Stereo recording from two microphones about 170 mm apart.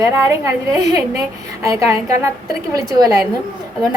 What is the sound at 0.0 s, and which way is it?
A woman's voice, 20° right (ahead or behind).